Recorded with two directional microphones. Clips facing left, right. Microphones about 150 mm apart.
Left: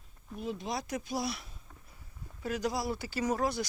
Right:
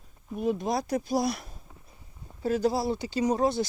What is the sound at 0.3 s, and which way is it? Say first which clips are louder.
Speech: right 9 dB; 50° right (ahead or behind).